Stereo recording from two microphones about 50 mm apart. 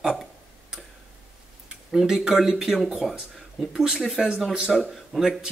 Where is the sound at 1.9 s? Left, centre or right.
Centre.